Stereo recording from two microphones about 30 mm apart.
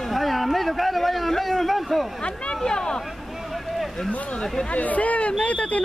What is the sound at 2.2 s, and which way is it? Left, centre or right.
Speech, left.